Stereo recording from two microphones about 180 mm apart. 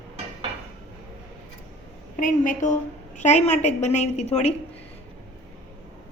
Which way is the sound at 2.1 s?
45° left (ahead or behind).